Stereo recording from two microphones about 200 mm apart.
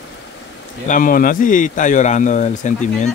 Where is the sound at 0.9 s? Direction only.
45° left (ahead or behind).